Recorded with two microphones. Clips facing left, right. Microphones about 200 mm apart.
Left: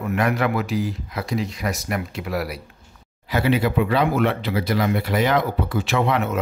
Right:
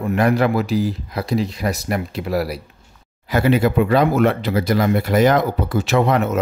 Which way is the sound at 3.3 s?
45° right (ahead or behind).